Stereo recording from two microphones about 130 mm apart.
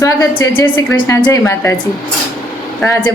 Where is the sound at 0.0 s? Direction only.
25° left (ahead or behind).